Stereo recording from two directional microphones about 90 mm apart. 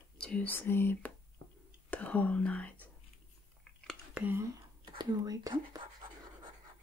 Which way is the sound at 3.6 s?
10° left (ahead or behind).